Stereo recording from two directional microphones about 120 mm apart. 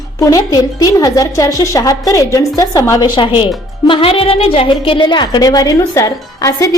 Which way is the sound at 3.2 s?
40° left (ahead or behind).